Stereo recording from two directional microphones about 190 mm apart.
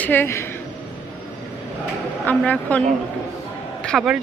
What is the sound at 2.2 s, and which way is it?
Speech, 10° left (ahead or behind).